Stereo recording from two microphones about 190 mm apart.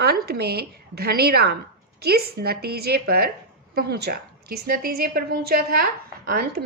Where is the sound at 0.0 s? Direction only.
55° right (ahead or behind).